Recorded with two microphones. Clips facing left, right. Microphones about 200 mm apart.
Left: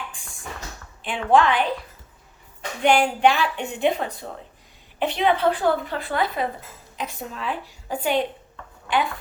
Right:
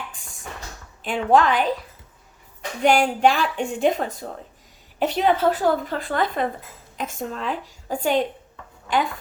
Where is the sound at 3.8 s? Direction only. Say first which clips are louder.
Even; 45° right (ahead or behind).